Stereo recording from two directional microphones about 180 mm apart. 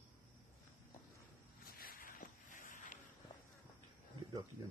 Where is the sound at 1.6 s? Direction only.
50° left (ahead or behind).